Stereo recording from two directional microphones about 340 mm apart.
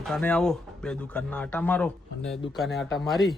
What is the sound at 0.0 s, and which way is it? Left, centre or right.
Speech, centre.